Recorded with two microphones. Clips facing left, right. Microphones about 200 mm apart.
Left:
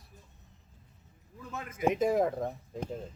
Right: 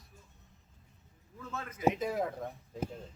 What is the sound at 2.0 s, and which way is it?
Speech, 45° left (ahead or behind).